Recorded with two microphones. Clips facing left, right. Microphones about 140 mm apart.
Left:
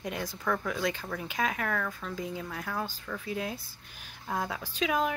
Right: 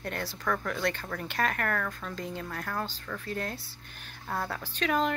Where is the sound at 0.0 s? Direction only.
10° left (ahead or behind).